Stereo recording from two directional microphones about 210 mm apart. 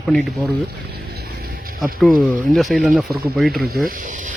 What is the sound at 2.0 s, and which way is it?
Speech, centre (ahead or behind).